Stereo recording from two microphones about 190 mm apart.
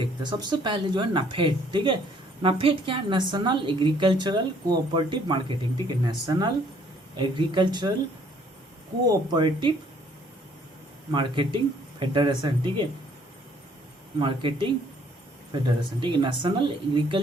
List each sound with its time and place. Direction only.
0.0 s a woman's voice: 25° right (ahead or behind)
9.3 s a woman's voice: 25° right (ahead or behind)
11.1 s a woman's voice: 25° right (ahead or behind)
14.2 s a woman's voice: 25° right (ahead or behind)